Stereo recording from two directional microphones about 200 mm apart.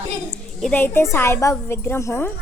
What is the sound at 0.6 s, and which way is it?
A woman's voice, 10° left (ahead or behind).